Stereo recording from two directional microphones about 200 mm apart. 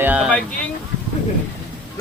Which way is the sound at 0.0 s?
10° right (ahead or behind).